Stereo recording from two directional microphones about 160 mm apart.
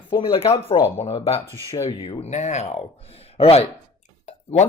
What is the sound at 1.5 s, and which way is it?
Speech, 20° right (ahead or behind).